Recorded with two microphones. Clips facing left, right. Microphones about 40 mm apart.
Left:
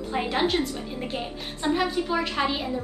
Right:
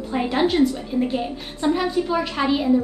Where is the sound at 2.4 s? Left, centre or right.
Centre.